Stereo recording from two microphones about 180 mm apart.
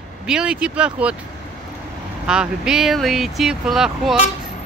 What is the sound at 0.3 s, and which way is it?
Speech, 5° right (ahead or behind).